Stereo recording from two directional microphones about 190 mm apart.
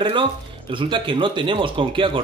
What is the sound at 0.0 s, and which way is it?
A man's voice, 25° right (ahead or behind).